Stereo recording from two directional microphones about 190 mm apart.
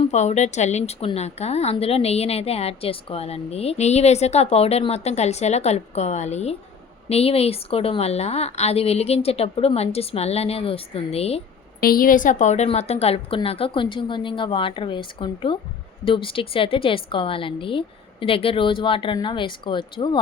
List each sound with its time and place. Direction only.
0.0 s a woman's voice: 35° left (ahead or behind)
11.8 s a woman's voice: 50° left (ahead or behind); by 20.2 s 25° left (ahead or behind)